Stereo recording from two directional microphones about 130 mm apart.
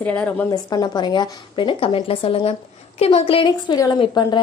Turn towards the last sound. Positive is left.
turn(degrees=35)  # may be behind; listen again after turning